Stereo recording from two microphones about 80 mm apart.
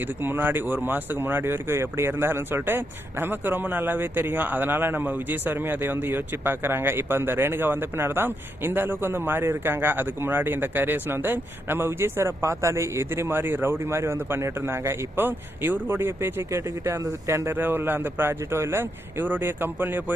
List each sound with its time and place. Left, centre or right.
0.2 s speech: right